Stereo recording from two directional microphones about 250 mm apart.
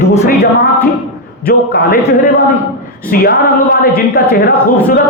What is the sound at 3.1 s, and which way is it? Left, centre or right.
A man's voice, left.